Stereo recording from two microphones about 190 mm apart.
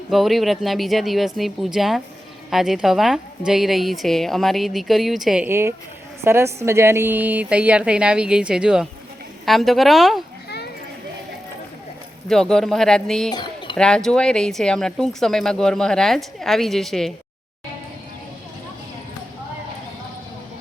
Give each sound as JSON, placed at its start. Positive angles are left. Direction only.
{"t": 0.1, "sound": "a woman's voice", "side_deg": 0}
{"t": 12.3, "sound": "speech", "side_deg": 5}
{"t": 13.3, "sound": "a sound", "side_deg": 25}
{"t": 13.7, "sound": "speech", "side_deg": 5}